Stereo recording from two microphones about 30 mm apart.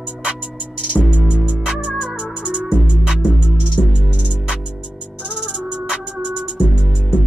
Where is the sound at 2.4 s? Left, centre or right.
Right.